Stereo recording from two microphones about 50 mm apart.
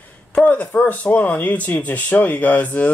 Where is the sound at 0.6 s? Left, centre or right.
Left.